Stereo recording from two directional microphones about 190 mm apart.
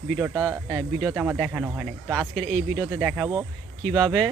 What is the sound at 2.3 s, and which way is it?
Speech, 5° left (ahead or behind).